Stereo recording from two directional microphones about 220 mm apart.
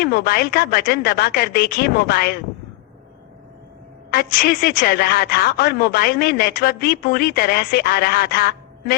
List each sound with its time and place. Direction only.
0.0 s a man's voice: 45° left (ahead or behind)
4.1 s a man's voice: 45° left (ahead or behind)